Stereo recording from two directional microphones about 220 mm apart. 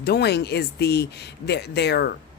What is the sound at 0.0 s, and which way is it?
Speech, 45° left (ahead or behind).